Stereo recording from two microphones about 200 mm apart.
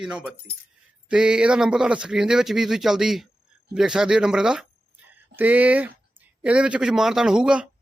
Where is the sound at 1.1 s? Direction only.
5° right (ahead or behind).